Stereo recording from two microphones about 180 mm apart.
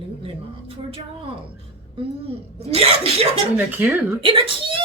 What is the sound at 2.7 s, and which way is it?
A woman's voice, 35° right (ahead or behind).